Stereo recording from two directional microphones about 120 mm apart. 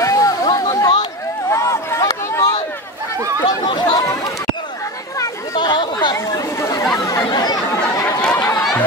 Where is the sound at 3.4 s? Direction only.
35° left (ahead or behind).